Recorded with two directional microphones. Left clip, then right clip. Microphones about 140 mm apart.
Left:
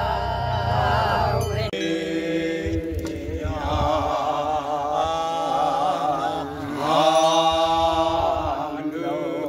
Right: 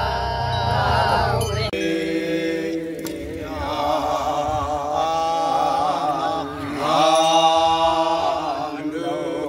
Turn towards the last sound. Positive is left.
turn(degrees=10)  # may be behind; listen again after turning